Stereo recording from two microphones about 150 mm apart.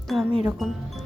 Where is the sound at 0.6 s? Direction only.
Centre (ahead or behind).